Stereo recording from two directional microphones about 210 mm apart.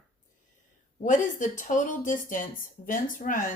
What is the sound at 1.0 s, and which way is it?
A woman's voice, 35° left (ahead or behind).